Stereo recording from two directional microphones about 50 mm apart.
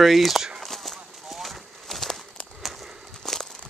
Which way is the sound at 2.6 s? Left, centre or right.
Centre.